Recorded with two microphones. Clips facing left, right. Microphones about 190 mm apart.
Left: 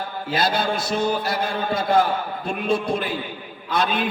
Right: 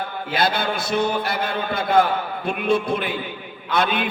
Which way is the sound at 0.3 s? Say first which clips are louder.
Even; 55° right (ahead or behind).